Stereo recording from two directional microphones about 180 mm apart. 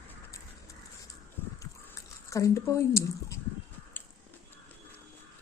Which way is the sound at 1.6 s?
15° left (ahead or behind).